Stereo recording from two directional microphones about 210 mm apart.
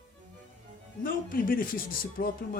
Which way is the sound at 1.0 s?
40° left (ahead or behind).